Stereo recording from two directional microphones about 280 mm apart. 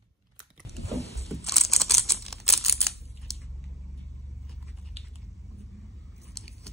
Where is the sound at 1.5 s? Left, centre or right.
Centre.